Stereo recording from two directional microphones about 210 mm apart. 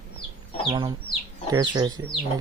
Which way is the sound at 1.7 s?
20° right (ahead or behind).